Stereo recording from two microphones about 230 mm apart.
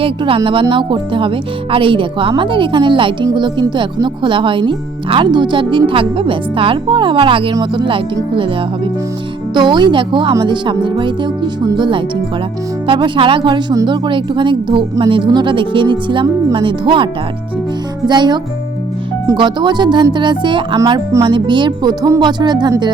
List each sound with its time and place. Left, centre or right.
0.0 s speech: right